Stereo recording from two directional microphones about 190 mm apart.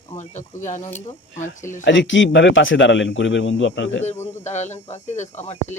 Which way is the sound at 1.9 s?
75° left (ahead or behind).